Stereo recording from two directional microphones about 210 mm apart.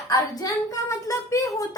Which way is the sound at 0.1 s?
15° left (ahead or behind).